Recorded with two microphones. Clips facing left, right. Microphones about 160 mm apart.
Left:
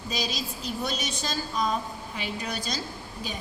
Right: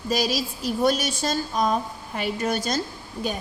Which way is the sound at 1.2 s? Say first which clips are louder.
Right 5 dB; 50° right (ahead or behind).